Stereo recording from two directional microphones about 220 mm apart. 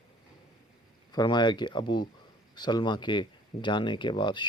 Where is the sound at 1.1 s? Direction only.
20° left (ahead or behind).